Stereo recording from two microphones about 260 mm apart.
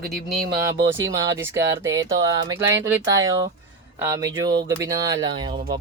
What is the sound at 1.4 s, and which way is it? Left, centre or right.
Speech, centre.